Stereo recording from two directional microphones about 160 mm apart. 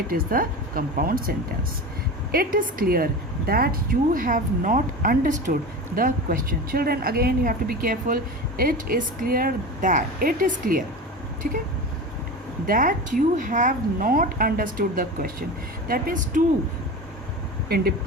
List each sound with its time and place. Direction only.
0.1 s speech: 65° right (ahead or behind)
12.6 s speech: 60° right (ahead or behind)